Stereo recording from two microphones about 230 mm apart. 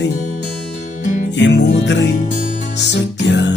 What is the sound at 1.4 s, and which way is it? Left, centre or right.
Music, left.